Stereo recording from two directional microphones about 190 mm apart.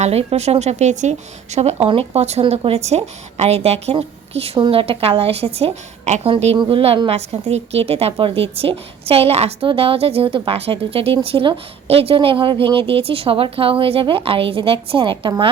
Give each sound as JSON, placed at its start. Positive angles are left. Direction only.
{"t": 0.0, "sound": "a woman's voice", "side_deg": -35}